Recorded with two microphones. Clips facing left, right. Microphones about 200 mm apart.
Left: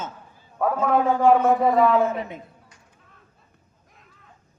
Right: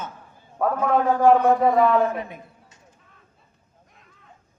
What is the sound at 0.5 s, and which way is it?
A man's voice, 5° left (ahead or behind).